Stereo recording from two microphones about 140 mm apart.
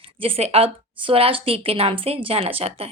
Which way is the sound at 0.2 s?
45° right (ahead or behind).